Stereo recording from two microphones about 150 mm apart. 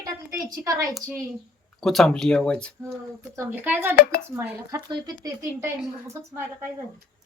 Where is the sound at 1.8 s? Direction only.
Centre (ahead or behind).